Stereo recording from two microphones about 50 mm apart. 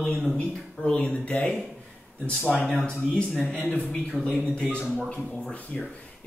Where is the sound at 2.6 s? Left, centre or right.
Centre.